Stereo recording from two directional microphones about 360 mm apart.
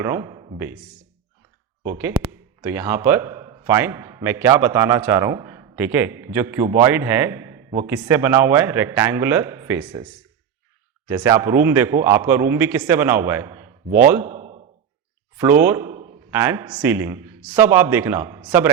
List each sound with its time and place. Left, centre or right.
0.0 s speech: centre
1.8 s a man's voice: centre
11.1 s a man's voice: centre
14.3 s sigh: centre
15.4 s speech: centre